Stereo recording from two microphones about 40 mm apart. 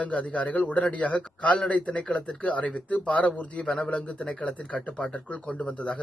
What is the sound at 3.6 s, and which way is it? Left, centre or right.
Speech, centre.